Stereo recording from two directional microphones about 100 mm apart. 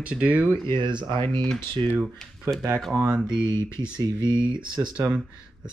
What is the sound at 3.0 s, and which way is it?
Speech, 10° right (ahead or behind).